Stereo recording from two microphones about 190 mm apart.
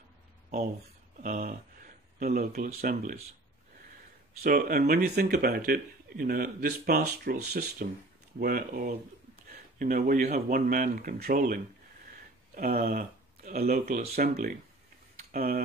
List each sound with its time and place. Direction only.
1.2 s speech: 45° right (ahead or behind)
4.4 s speech: 50° right (ahead or behind)